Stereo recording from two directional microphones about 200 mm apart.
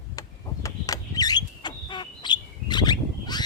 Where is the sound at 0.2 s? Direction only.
20° left (ahead or behind).